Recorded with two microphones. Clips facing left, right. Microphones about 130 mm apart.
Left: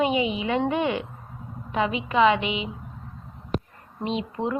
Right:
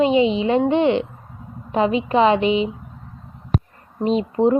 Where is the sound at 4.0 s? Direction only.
40° right (ahead or behind).